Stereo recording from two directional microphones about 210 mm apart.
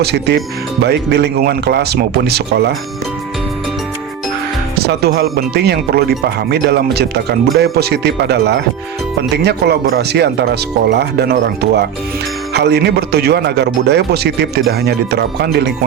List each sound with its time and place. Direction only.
0.0 s speech: 50° right (ahead or behind)
4.8 s speech: 50° right (ahead or behind)